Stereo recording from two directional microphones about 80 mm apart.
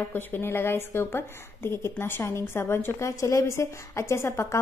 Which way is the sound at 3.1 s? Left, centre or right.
Left.